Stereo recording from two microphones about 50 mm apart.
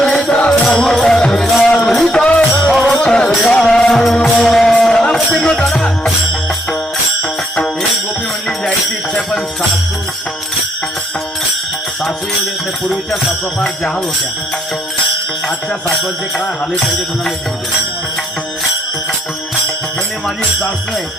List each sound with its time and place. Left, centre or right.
0.0 s music: centre
0.3 s music: left
0.8 s music: centre
2.0 s music: left
7.2 s music: centre
9.1 s music: centre
16.7 s music: centre
20.2 s music: centre